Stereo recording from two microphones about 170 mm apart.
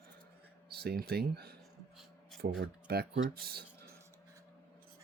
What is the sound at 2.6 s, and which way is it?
Speech, 70° right (ahead or behind).